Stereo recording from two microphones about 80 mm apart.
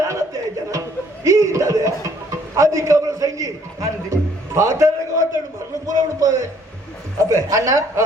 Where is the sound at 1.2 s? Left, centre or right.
Right.